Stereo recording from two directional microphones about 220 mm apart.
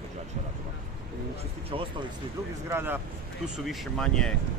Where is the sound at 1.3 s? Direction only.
25° right (ahead or behind).